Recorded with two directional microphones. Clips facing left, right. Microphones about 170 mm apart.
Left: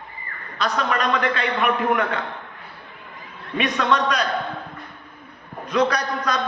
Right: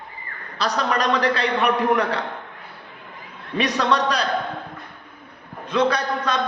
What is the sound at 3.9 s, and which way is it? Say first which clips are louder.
Speech: left 2 dB; 35° right (ahead or behind).